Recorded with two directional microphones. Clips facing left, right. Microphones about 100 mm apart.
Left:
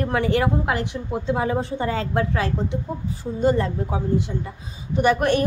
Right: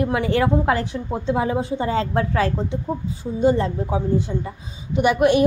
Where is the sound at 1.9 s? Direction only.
35° right (ahead or behind).